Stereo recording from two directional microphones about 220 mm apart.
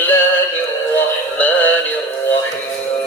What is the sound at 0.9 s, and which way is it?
Synthetic singing, 10° left (ahead or behind).